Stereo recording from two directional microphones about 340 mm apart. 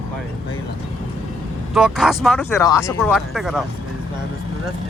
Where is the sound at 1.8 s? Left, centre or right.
Centre.